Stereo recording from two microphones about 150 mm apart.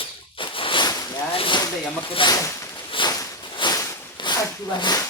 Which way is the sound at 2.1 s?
35° left (ahead or behind).